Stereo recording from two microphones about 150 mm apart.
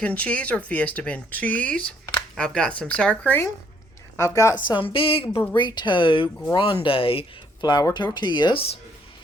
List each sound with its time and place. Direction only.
0.0 s a woman's voice: 10° left (ahead or behind)
4.7 s speech: 35° left (ahead or behind)